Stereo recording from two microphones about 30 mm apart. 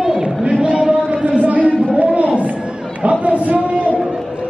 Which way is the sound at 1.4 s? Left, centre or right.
Right.